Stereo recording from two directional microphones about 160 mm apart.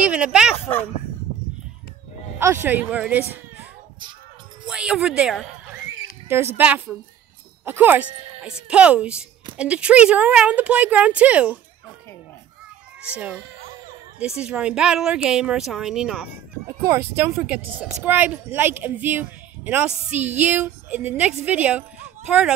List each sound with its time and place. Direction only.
0.0 s speech: 5° right (ahead or behind)
2.3 s speech: 15° right (ahead or behind)
4.6 s speech: 5° right (ahead or behind)
6.2 s speech: 15° right (ahead or behind)
13.1 s speech: 5° right (ahead or behind)
16.6 s speech: 15° right (ahead or behind)